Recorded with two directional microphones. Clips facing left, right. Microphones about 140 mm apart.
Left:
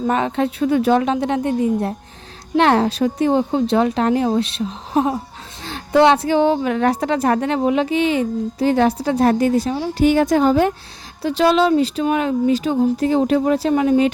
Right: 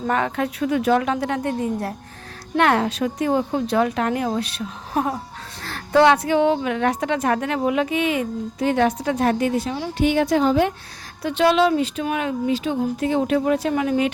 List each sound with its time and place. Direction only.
0.1 s a woman's voice: 20° left (ahead or behind)